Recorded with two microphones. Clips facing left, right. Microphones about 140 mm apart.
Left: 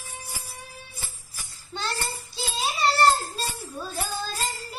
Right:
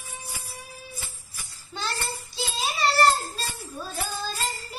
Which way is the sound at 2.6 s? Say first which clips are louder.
Even; centre (ahead or behind).